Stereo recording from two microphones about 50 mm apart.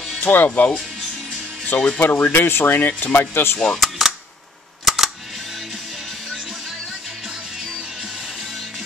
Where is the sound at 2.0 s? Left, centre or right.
Left.